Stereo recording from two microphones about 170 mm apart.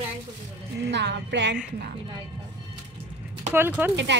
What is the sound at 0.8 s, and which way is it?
Speech, 90° right.